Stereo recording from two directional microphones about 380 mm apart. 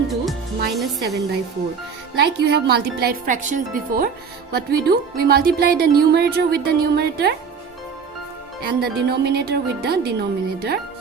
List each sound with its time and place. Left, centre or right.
0.7 s a woman's voice: centre
1.0 s speech: right
8.6 s speech: right